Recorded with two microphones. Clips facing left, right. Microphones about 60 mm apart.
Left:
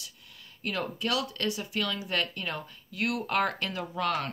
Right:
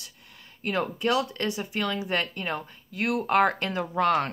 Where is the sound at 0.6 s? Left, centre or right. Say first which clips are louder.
Right 5 dB; right.